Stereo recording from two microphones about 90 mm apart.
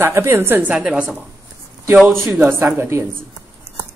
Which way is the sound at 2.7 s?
30° right (ahead or behind).